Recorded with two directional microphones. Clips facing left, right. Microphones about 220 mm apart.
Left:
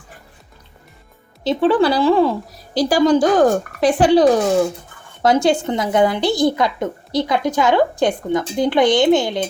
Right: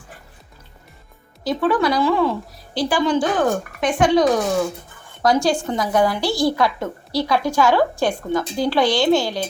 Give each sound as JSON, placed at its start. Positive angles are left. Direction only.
{"t": 1.5, "sound": "a woman's voice", "side_deg": 30}